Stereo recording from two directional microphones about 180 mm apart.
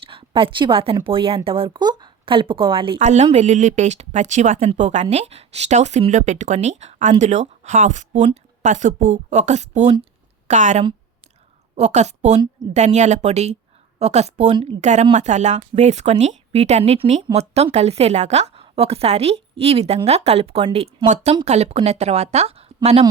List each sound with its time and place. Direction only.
0.0 s a woman's voice: 30° right (ahead or behind)